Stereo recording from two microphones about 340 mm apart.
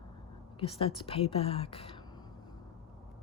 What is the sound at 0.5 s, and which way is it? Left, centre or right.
Speech, centre.